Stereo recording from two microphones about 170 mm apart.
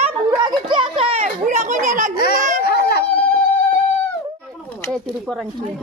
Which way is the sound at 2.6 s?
75° left (ahead or behind).